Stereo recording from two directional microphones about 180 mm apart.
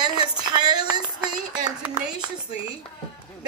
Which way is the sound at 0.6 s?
20° right (ahead or behind).